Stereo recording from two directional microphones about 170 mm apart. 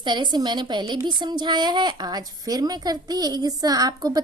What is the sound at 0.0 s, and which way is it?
Speech, 25° right (ahead or behind).